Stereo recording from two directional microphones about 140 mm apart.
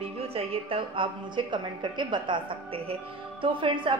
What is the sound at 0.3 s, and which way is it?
A woman's voice, 45° right (ahead or behind).